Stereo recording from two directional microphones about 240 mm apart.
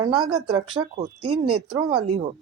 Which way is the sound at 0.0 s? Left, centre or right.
Centre.